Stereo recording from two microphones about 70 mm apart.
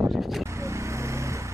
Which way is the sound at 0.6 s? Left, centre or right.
Right.